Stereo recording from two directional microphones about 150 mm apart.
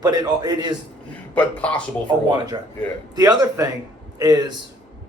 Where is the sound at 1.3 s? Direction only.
10° left (ahead or behind).